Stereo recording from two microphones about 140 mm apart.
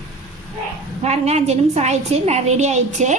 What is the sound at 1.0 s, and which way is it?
A woman's voice, 50° right (ahead or behind).